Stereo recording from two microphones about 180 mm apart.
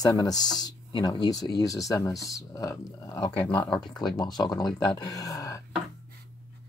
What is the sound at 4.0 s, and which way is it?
Speech, 25° left (ahead or behind).